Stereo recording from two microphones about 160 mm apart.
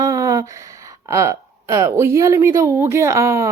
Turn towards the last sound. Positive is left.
turn(degrees=-20)  # may be behind; listen again after turning